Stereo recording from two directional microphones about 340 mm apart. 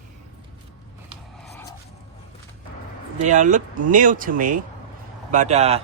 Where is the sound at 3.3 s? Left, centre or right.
Right.